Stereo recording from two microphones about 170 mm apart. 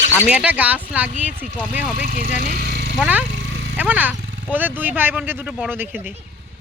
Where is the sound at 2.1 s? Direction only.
55° right (ahead or behind).